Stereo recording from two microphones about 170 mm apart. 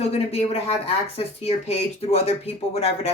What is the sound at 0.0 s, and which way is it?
Speech, 35° left (ahead or behind).